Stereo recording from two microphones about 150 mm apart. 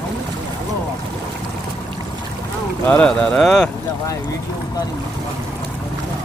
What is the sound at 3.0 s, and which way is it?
Speech, 5° left (ahead or behind).